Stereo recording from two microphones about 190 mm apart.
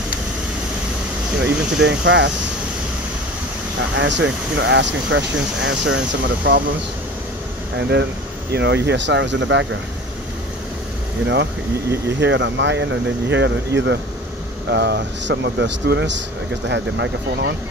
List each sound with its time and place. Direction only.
1.4 s speech: 70° right (ahead or behind)
3.9 s speech: 70° right (ahead or behind)
7.9 s speech: 65° right (ahead or behind)
12.2 s speech: 70° right (ahead or behind)